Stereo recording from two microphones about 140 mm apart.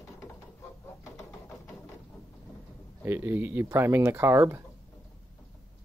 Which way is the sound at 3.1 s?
15° right (ahead or behind).